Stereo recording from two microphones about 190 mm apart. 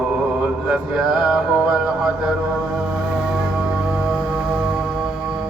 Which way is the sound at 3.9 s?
5° right (ahead or behind).